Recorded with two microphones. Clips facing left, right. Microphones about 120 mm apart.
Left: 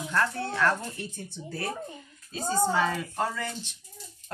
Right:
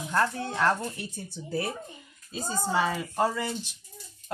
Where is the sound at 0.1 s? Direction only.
20° right (ahead or behind).